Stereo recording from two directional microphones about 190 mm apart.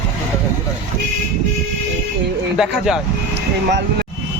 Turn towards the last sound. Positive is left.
turn(degrees=-65)  # may be behind; listen again after turning